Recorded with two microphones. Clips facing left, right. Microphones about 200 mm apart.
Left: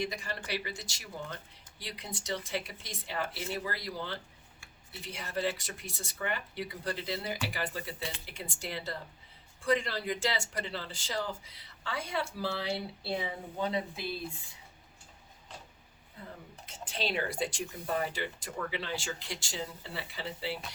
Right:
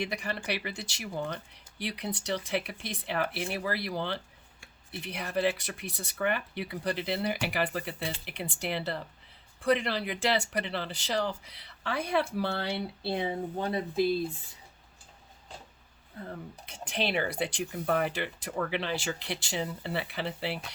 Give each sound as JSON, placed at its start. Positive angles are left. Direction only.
{"t": 0.0, "sound": "speech", "side_deg": -65}
{"t": 13.1, "sound": "speech", "side_deg": -50}
{"t": 16.6, "sound": "speech", "side_deg": -65}